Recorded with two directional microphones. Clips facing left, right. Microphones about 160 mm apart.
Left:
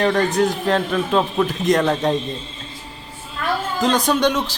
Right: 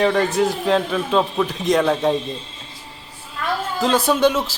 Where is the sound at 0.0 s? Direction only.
Centre (ahead or behind).